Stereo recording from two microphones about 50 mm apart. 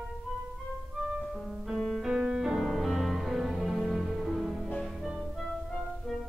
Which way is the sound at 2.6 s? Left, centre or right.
Centre.